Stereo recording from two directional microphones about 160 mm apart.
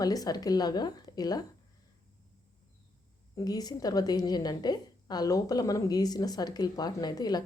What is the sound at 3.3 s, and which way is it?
A woman's voice, 25° left (ahead or behind).